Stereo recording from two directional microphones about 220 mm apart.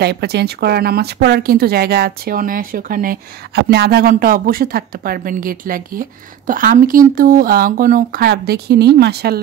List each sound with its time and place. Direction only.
0.0 s speech: 50° right (ahead or behind)